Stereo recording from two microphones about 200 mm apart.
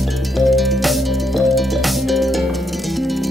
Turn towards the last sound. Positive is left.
turn(degrees=0)  # may be behind; listen again after turning